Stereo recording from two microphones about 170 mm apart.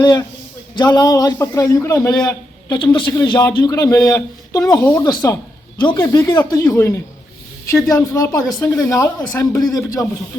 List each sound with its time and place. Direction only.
0.0 s a man's voice: 25° left (ahead or behind)